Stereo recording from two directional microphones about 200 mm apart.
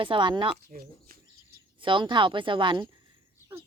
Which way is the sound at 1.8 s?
25° right (ahead or behind).